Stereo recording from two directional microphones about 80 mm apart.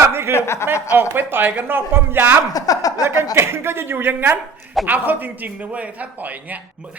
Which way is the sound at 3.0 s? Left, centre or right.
Right.